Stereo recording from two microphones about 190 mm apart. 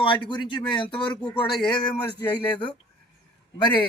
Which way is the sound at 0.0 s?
25° left (ahead or behind).